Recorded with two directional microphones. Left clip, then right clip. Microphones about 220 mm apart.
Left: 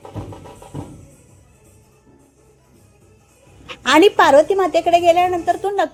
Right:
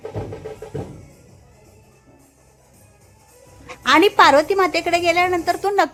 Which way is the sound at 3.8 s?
15° left (ahead or behind).